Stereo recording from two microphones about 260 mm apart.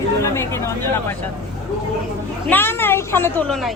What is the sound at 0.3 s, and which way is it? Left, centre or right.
Speech, centre.